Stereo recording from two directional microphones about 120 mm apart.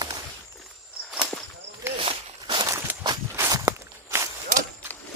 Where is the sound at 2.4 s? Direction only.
45° right (ahead or behind).